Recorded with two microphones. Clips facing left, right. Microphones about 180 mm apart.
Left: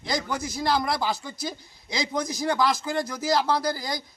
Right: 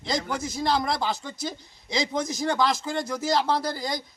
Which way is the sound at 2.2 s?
20° right (ahead or behind).